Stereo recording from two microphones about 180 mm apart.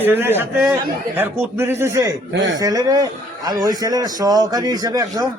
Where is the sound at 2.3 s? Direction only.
90° right.